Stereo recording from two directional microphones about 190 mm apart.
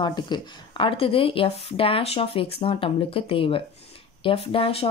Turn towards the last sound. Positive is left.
turn(degrees=30)  # may be behind; listen again after turning